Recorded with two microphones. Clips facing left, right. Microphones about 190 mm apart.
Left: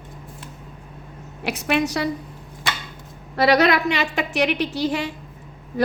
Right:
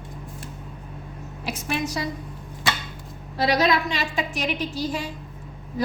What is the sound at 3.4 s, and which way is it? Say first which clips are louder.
A woman's voice: left 4 dB; 65° left (ahead or behind).